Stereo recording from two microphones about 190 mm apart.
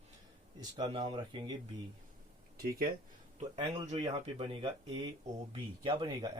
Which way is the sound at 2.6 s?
50° right (ahead or behind).